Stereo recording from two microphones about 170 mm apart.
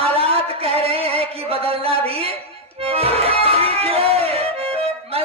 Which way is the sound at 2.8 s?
35° right (ahead or behind).